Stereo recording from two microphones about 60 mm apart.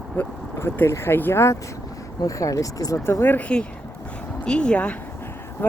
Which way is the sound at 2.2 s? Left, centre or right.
Left.